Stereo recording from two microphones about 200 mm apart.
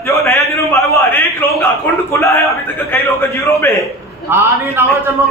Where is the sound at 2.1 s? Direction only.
15° left (ahead or behind).